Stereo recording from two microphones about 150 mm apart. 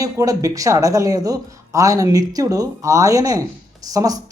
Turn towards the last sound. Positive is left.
turn(degrees=-25)  # may be behind; listen again after turning